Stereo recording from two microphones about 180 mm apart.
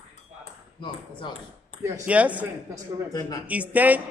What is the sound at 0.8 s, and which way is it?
Ping, 25° left (ahead or behind).